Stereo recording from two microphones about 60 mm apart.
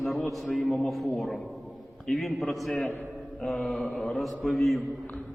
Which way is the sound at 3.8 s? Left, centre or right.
Left.